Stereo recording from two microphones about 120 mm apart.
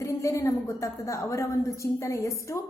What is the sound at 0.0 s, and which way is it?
A woman's voice, 25° left (ahead or behind).